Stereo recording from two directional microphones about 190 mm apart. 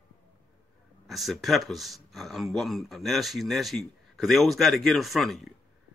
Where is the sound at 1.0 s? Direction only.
Centre (ahead or behind).